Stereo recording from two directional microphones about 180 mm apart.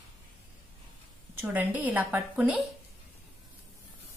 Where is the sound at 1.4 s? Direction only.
10° right (ahead or behind).